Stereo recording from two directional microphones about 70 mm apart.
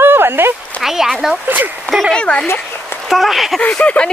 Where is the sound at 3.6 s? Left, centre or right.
Centre.